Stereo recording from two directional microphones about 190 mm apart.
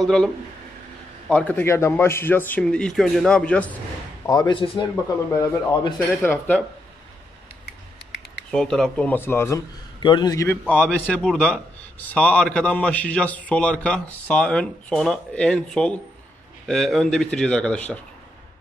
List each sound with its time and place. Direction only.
0.0 s a man's voice: 5° left (ahead or behind)
1.3 s a man's voice: 10° left (ahead or behind)
4.3 s a man's voice: 20° left (ahead or behind)
6.2 s a man's voice: 10° left (ahead or behind)
8.5 s a man's voice: 5° left (ahead or behind)